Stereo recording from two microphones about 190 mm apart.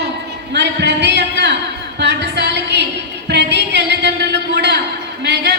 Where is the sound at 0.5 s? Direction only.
65° right (ahead or behind).